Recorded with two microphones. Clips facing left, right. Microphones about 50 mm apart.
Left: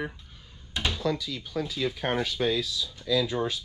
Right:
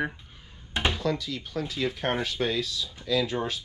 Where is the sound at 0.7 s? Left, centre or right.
Right.